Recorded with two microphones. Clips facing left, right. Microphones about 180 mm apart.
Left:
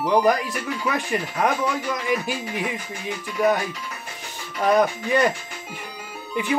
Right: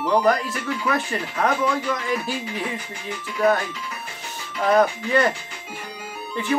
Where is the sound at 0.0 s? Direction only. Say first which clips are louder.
Even; 15° left (ahead or behind).